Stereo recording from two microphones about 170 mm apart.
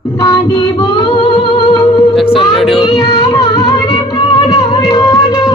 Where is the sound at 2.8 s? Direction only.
25° left (ahead or behind).